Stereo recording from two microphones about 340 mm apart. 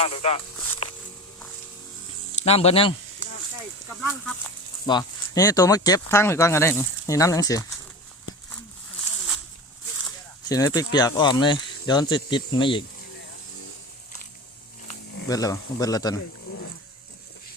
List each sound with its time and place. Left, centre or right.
0.0 s speech: centre
2.4 s speech: centre
4.9 s speech: centre
10.5 s speech: centre
14.8 s a sound: left
15.3 s speech: centre